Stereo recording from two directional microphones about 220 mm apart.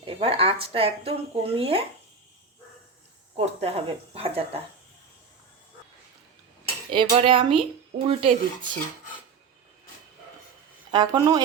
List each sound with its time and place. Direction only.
0.0 s speech: 25° right (ahead or behind)
3.3 s speech: 30° right (ahead or behind)
6.9 s speech: 20° right (ahead or behind)
10.9 s speech: 20° right (ahead or behind)